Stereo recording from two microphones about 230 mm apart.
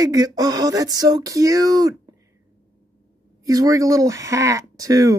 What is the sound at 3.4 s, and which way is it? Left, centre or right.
Speech, centre.